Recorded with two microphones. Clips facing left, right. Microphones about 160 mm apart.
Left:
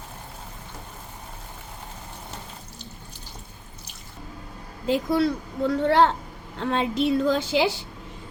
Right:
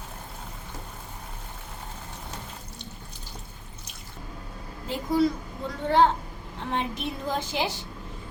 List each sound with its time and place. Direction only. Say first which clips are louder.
4.9 s a woman's voice: left 2 dB; 75° left (ahead or behind)
6.6 s a woman's voice: left 7 dB; 90° left